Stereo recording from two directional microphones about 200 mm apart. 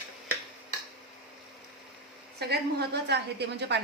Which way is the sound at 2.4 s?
55° right (ahead or behind).